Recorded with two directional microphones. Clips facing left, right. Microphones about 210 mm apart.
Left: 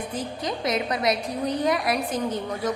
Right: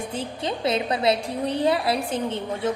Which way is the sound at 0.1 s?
30° right (ahead or behind).